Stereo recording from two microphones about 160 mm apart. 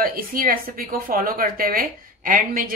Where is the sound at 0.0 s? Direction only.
65° right (ahead or behind).